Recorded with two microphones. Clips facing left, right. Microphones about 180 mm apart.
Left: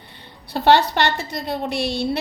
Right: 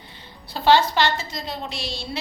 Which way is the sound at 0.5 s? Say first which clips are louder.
Left 2 dB; 65° left (ahead or behind).